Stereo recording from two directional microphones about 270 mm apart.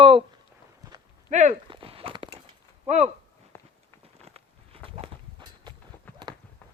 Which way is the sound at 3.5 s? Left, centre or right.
Centre.